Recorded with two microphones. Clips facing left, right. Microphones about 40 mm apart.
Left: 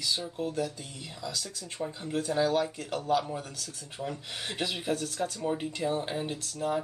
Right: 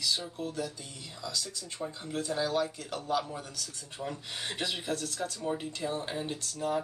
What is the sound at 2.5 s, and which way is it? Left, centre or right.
Speech, left.